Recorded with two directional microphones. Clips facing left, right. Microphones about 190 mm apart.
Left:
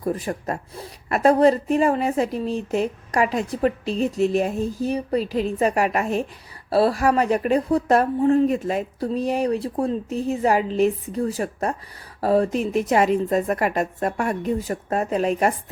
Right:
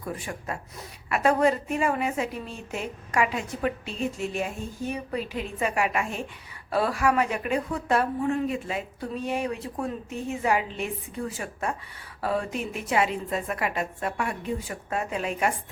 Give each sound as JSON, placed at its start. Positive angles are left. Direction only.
{"t": 0.0, "sound": "speech", "side_deg": 35}